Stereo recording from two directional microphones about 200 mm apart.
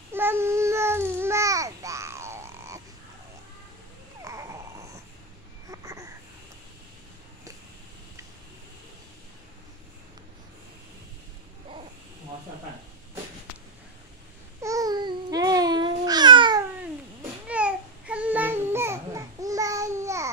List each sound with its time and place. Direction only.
0.1 s babbling: 10° right (ahead or behind)
4.2 s babbling: 15° right (ahead or behind)
5.7 s a sound: 15° right (ahead or behind)
14.6 s babbling: 15° right (ahead or behind)
17.5 s babbling: 5° right (ahead or behind)